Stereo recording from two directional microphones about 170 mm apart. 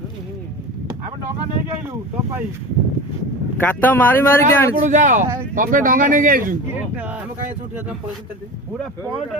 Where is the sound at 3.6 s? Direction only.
10° left (ahead or behind).